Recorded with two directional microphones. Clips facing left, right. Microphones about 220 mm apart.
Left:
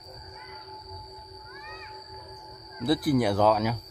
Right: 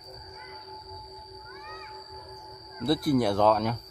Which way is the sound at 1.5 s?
55° right (ahead or behind).